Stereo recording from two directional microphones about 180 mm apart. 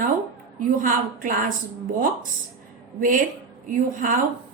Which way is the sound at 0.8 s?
50° right (ahead or behind).